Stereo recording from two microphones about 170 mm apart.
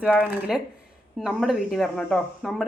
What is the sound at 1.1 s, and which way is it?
A woman's voice, 5° left (ahead or behind).